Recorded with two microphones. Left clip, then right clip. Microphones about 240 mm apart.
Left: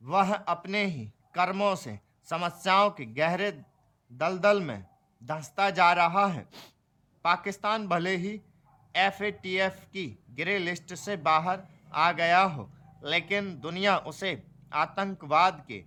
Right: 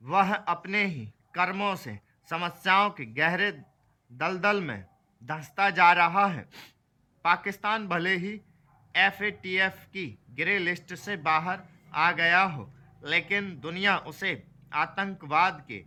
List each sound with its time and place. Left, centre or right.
0.0 s a man's voice: centre